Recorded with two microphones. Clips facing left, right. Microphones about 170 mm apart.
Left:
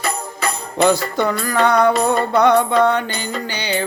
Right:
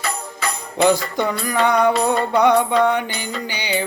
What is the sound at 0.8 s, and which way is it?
Music, 15° right (ahead or behind).